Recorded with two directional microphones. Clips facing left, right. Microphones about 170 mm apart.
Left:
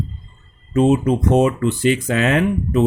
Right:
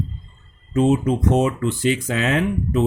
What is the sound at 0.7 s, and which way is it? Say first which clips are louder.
Speech: left 2 dB; 60° left (ahead or behind).